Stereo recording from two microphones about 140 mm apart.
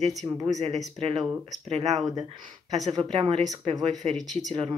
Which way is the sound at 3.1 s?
45° right (ahead or behind).